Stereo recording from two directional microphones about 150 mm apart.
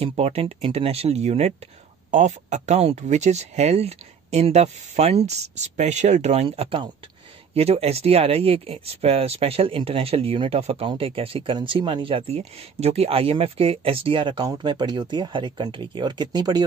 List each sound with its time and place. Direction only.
0.0 s speech: 40° right (ahead or behind)